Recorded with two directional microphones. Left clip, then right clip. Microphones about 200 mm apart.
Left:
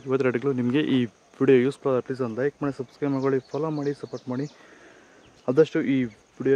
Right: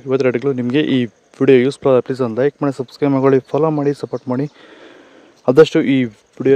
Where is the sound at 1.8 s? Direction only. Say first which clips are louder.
Right 11 dB; 45° right (ahead or behind).